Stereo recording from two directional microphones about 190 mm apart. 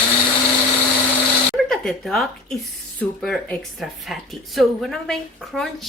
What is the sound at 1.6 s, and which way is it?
Speech, centre (ahead or behind).